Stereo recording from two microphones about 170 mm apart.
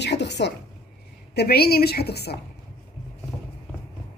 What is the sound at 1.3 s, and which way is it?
Speech, 70° left (ahead or behind).